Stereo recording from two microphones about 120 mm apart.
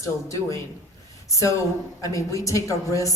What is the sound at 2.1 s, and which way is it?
Speech, 25° left (ahead or behind).